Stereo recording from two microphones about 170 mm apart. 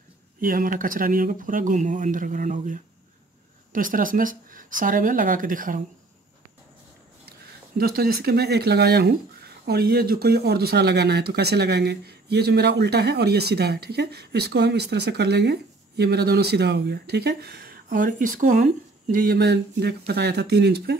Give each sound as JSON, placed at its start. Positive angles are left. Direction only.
{"t": 0.4, "sound": "speech", "side_deg": -55}
{"t": 7.2, "sound": "speech", "side_deg": -65}